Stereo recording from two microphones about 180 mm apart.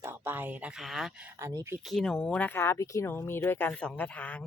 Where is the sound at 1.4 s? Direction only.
15° right (ahead or behind).